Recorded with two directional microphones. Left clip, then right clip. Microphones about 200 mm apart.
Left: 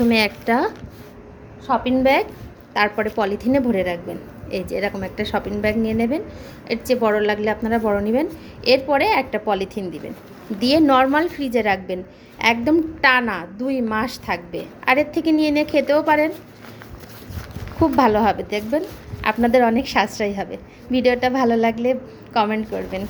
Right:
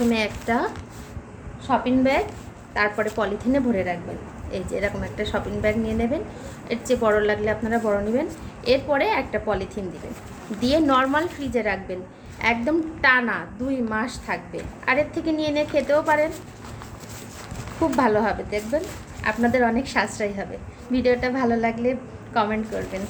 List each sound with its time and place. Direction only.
0.1 s a woman's voice: 40° left (ahead or behind)
17.9 s a woman's voice: 40° left (ahead or behind)